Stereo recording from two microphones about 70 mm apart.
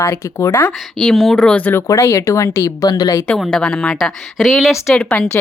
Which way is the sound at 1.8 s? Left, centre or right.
Left.